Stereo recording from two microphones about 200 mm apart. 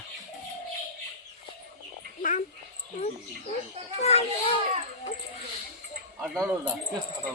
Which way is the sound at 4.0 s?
30° left (ahead or behind).